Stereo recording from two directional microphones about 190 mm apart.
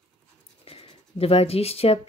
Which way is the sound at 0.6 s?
30° left (ahead or behind).